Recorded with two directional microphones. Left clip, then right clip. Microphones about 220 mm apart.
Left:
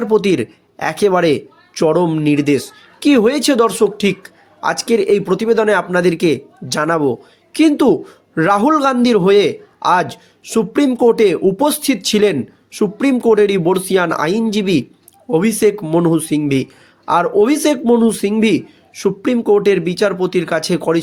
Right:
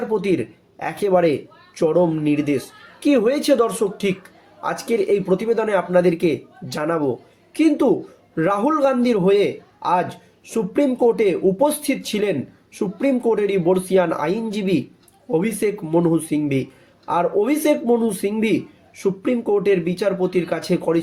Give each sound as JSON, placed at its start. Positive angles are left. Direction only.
{"t": 0.1, "sound": "a man's voice", "side_deg": 45}